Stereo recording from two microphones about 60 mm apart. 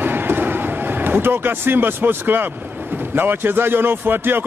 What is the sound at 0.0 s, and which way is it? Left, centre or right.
Vehicle, right.